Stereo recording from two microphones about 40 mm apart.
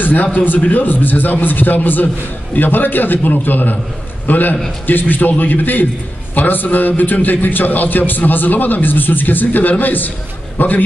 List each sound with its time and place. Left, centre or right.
0.0 s a man's voice: left